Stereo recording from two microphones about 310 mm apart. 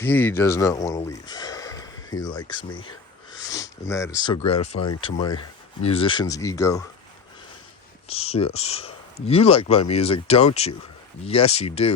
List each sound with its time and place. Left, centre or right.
0.0 s speech: centre
3.4 s sniff: centre
4.3 s speech: centre
8.0 s speech: centre